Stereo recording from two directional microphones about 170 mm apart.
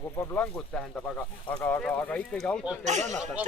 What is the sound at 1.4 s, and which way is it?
Speech, 10° left (ahead or behind).